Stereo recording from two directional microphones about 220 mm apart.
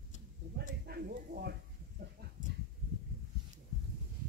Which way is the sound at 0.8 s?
45° right (ahead or behind).